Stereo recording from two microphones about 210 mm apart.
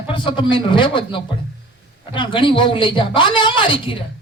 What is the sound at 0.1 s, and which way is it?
A man's voice, 20° left (ahead or behind).